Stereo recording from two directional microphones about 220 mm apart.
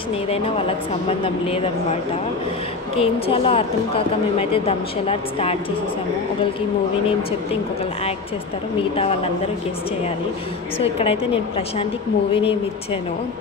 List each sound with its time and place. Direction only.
0.3 s speech: 25° left (ahead or behind)
3.0 s speech: 25° left (ahead or behind)
8.9 s speech: 25° left (ahead or behind)
10.8 s speech: 25° left (ahead or behind)